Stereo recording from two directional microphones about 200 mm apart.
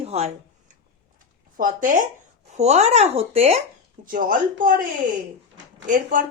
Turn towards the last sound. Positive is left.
turn(degrees=-40)  # may be behind; listen again after turning